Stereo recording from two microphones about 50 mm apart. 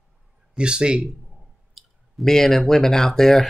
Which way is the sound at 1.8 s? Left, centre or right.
Centre.